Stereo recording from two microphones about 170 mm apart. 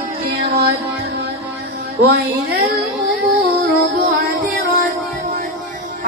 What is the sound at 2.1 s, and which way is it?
Music, 80° right.